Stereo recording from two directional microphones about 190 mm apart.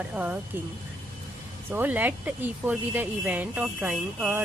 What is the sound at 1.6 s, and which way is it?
Speech, 10° right (ahead or behind).